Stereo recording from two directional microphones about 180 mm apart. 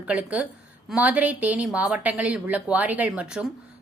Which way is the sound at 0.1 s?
10° right (ahead or behind).